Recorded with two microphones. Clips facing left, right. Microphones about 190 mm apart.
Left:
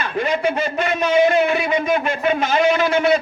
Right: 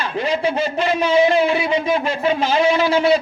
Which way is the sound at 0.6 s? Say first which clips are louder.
Right 1 dB; 55° left (ahead or behind).